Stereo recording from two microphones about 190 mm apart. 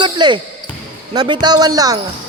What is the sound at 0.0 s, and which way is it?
Basketball bounce, 25° right (ahead or behind).